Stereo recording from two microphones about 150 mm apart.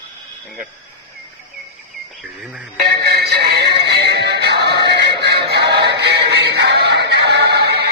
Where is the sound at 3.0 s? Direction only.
90° right.